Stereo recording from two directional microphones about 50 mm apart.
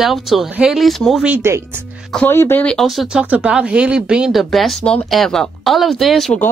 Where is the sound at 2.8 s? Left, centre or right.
Centre.